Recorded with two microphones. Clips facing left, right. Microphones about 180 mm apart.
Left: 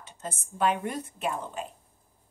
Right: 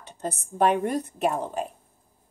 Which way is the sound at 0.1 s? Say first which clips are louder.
Right 7 dB; 35° right (ahead or behind).